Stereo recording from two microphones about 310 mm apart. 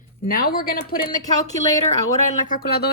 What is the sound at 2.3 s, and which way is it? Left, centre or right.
Speech, left.